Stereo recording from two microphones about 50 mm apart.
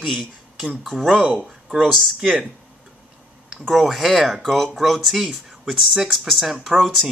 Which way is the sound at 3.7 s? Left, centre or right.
Centre.